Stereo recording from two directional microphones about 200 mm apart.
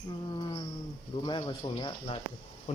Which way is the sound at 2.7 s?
30° left (ahead or behind).